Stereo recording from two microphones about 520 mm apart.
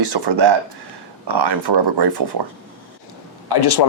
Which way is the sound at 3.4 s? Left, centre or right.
Left.